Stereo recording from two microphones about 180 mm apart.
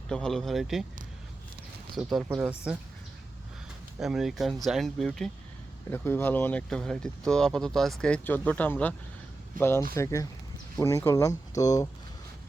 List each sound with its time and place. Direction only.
0.1 s speech: 5° left (ahead or behind)
1.9 s speech: centre (ahead or behind)
4.0 s speech: centre (ahead or behind); by 11.9 s 20° left (ahead or behind)